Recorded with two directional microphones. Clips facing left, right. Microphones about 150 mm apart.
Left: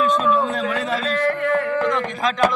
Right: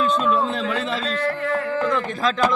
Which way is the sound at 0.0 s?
30° right (ahead or behind).